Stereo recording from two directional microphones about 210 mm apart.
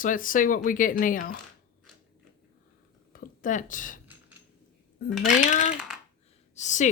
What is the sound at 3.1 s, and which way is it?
Speech, 40° left (ahead or behind).